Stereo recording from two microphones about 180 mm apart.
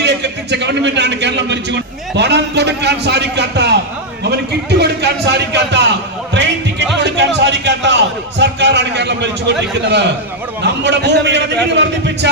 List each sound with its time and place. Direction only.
0.0 s a man's voice: 70° right (ahead or behind)
6.3 s music: 75° right (ahead or behind)
10.6 s a man's voice: 70° right (ahead or behind)